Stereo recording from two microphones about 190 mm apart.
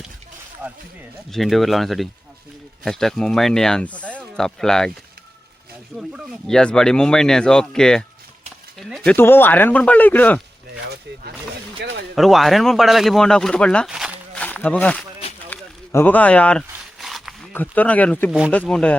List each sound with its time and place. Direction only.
0.6 s speech: 10° right (ahead or behind)
1.3 s speech: centre (ahead or behind)
6.0 s speech: centre (ahead or behind)
11.8 s speech: 65° right (ahead or behind)
12.1 s speech: centre (ahead or behind)
14.3 s a sound: 10° left (ahead or behind)
15.4 s zipper: 10° left (ahead or behind)
17.5 s speech: 10° left (ahead or behind)
18.3 s speech: 5° right (ahead or behind)
18.5 s speech: 5° left (ahead or behind)